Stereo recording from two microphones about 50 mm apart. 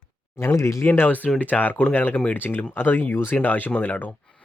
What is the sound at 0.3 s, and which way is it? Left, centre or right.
Speech, left.